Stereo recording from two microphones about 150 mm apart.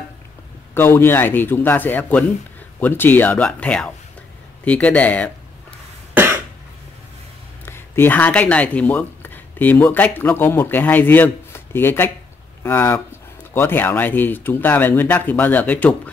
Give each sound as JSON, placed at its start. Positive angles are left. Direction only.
{"t": 0.7, "sound": "speech", "side_deg": 15}
{"t": 7.6, "sound": "speech", "side_deg": 15}